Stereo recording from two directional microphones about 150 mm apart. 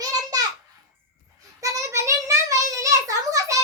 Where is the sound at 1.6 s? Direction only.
20° right (ahead or behind).